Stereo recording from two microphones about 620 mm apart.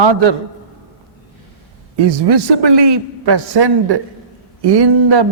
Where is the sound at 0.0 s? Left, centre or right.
Right.